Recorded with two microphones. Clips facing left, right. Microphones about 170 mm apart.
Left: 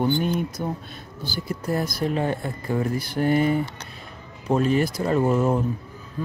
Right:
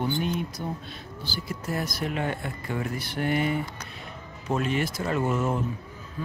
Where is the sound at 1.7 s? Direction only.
35° left (ahead or behind).